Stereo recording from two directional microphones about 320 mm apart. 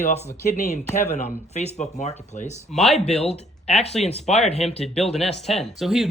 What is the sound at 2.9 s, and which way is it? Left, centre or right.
Speech, centre.